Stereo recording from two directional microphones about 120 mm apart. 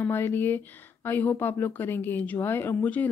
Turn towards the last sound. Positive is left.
turn(degrees=15)  # may be behind; listen again after turning